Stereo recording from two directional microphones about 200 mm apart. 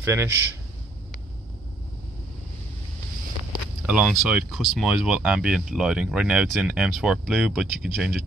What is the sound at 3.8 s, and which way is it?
Speech, 5° right (ahead or behind).